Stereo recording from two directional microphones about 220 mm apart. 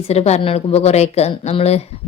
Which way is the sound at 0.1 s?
30° left (ahead or behind).